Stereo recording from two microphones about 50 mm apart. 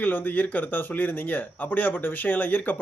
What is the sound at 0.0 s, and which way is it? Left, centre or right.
A man's voice, left.